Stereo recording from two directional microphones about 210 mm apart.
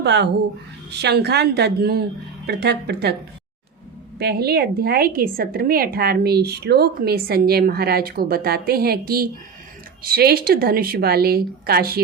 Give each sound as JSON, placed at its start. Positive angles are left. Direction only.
{"t": 0.0, "sound": "speech", "side_deg": -55}
{"t": 4.2, "sound": "speech", "side_deg": -50}